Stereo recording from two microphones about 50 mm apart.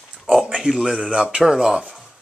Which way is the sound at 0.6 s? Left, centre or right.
Centre.